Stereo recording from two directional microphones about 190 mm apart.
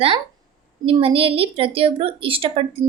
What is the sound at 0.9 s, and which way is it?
A woman's voice, 30° right (ahead or behind).